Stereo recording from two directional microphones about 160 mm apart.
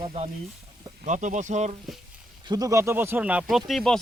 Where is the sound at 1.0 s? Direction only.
50° right (ahead or behind).